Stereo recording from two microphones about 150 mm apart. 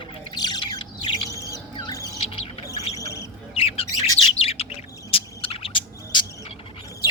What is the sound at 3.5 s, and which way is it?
Bird, 40° left (ahead or behind).